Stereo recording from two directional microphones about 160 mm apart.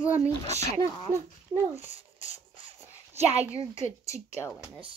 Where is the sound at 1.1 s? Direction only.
15° right (ahead or behind).